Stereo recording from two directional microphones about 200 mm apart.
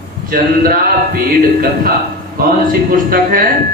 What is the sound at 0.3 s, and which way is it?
Speech, 45° right (ahead or behind).